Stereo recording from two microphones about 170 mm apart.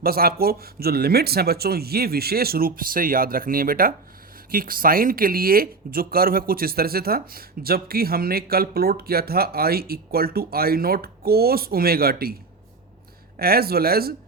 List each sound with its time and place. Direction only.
0.0 s speech: 60° right (ahead or behind)